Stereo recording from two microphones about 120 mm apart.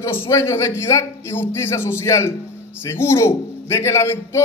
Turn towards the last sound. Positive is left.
turn(degrees=25)  # may be behind; listen again after turning